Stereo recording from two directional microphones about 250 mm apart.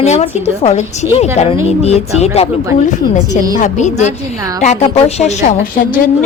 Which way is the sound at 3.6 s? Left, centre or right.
Left.